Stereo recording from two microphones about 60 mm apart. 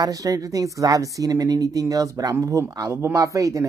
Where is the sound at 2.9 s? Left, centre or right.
Right.